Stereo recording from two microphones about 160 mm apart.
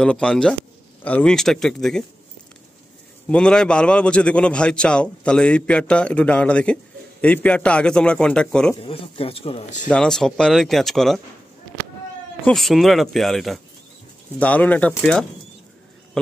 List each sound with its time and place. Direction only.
0.0 s speech: 5° left (ahead or behind)
3.3 s a man's voice: 5° left (ahead or behind)
8.8 s a man's voice: 35° left (ahead or behind)
9.8 s speech: 5° left (ahead or behind)
12.4 s a man's voice: centre (ahead or behind)